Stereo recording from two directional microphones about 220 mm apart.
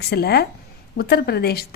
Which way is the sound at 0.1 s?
45° left (ahead or behind).